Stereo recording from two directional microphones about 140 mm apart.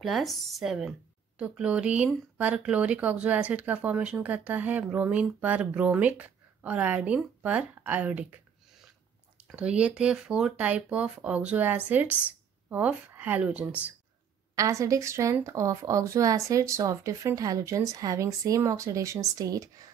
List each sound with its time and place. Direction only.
0.0 s speech: centre (ahead or behind)
9.5 s speech: 5° right (ahead or behind)
14.5 s speech: 25° right (ahead or behind)